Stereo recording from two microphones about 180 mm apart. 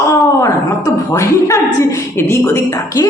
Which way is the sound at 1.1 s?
15° left (ahead or behind).